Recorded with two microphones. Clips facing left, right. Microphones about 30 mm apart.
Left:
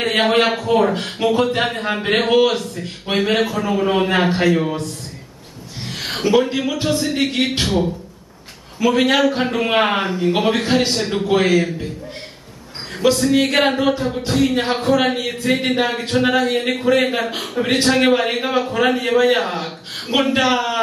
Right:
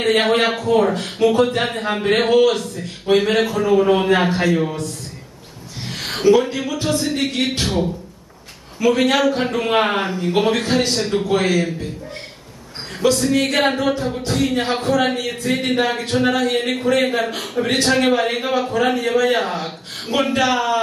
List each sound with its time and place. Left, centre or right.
0.0 s a man's voice: centre
0.9 s a man's voice: left
1.6 s a man's voice: centre
2.0 s a man's voice: centre
3.2 s a man's voice: centre
6.0 s a sound: centre
6.5 s a man's voice: left
7.6 s a man's voice: centre
8.9 s a man's voice: centre
10.6 s a man's voice: left
13.0 s a man's voice: centre